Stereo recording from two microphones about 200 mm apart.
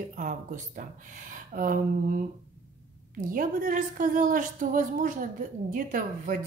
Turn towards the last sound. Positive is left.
turn(degrees=-45)  # may be behind; listen again after turning